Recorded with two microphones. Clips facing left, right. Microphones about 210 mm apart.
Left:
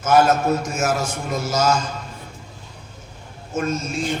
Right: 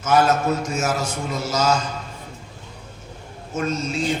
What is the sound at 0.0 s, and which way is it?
A man's voice, 50° left (ahead or behind).